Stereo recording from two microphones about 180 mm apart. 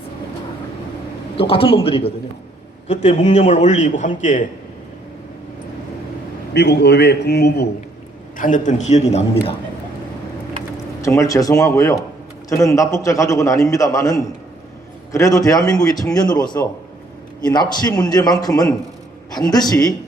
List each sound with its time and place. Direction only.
1.4 s a man's voice: 30° left (ahead or behind); by 4.4 s 45° left (ahead or behind)
6.5 s a man's voice: 70° left (ahead or behind)
8.4 s a man's voice: 45° left (ahead or behind)
11.0 s a man's voice: 15° left (ahead or behind)